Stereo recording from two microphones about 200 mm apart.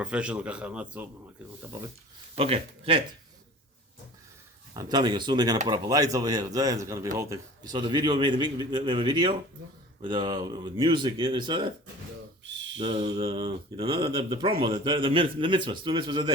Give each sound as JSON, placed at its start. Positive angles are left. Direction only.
{"t": 0.0, "sound": "a man's voice", "side_deg": -5}
{"t": 2.3, "sound": "a man's voice", "side_deg": -30}
{"t": 4.7, "sound": "a man's voice", "side_deg": -20}
{"t": 12.8, "sound": "a man's voice", "side_deg": -30}